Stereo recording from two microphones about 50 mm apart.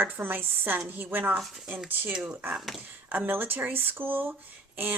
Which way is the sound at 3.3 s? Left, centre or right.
Right.